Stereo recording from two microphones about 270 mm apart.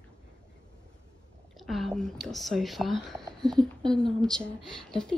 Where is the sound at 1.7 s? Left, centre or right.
Centre.